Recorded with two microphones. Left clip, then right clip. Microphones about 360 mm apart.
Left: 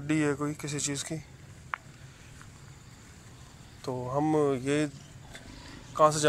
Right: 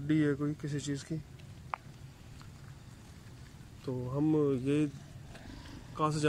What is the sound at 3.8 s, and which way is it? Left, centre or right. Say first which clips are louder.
Speech: left 4 dB; centre.